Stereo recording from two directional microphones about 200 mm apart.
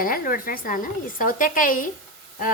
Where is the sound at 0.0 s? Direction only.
45° left (ahead or behind).